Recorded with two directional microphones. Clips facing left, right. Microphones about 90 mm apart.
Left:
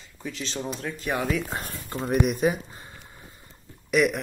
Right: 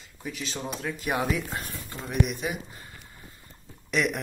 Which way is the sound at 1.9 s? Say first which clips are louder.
Left 5 dB; 45° left (ahead or behind).